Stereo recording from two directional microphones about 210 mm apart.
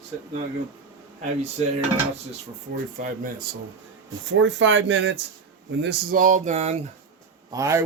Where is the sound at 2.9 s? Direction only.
40° right (ahead or behind).